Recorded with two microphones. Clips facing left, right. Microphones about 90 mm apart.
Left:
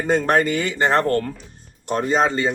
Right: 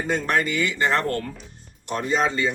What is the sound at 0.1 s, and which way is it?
Speech, 40° left (ahead or behind).